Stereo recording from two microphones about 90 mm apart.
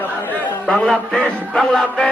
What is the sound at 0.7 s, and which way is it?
Music, 5° left (ahead or behind).